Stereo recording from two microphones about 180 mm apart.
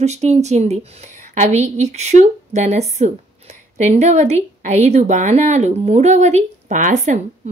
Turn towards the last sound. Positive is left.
turn(degrees=-40)  # may be behind; listen again after turning